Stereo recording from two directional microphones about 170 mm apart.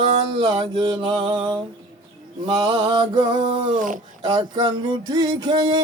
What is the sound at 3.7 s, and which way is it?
Speech, 50° right (ahead or behind).